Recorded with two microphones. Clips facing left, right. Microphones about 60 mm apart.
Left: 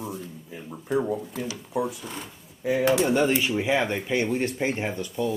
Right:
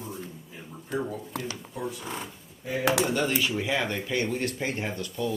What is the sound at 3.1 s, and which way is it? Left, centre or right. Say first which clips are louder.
Speech: left 4 dB; centre.